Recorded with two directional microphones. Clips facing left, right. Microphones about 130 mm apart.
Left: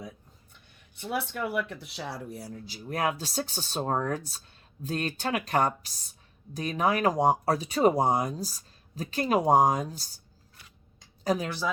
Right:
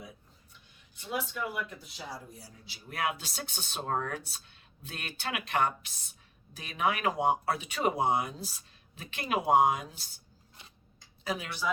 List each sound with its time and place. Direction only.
1.0 s speech: 65° left (ahead or behind)
2.5 s speech: 40° left (ahead or behind)
10.6 s scissors: 20° right (ahead or behind)
11.2 s speech: 40° left (ahead or behind)